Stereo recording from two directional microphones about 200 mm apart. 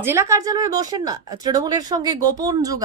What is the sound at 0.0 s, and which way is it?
Speech, 10° right (ahead or behind).